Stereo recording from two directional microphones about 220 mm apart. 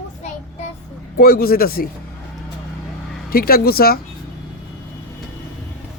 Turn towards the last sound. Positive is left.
turn(degrees=45)  # may be behind; listen again after turning